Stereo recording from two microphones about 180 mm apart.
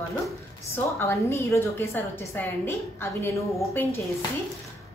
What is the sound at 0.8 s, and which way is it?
A woman's voice, 15° left (ahead or behind).